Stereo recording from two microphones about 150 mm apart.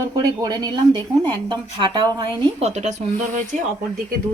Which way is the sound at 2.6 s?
45° right (ahead or behind).